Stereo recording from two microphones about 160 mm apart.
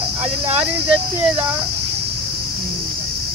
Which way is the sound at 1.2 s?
10° right (ahead or behind).